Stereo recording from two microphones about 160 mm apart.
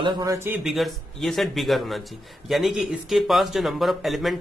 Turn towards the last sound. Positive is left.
turn(degrees=0)  # may be behind; listen again after turning